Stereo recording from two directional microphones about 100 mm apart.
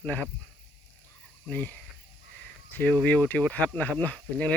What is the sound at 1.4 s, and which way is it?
Speech, 20° left (ahead or behind).